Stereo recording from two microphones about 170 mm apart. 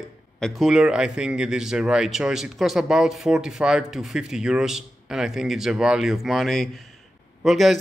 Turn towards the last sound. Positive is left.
turn(degrees=0)  # may be behind; listen again after turning